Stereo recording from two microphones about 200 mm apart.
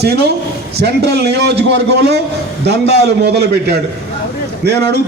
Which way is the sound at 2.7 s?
55° right (ahead or behind).